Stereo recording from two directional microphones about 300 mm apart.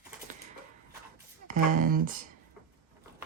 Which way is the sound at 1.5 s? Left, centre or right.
Right.